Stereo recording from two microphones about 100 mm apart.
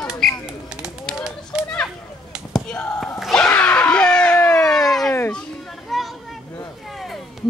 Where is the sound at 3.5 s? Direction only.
15° left (ahead or behind).